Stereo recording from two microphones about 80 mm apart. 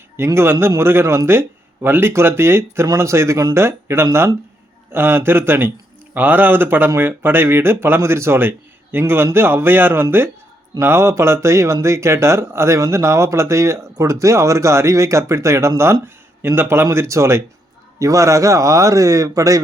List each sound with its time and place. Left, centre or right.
0.3 s speech: right
2.8 s a man's voice: right